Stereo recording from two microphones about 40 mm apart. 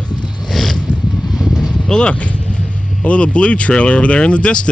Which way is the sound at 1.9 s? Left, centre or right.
Left.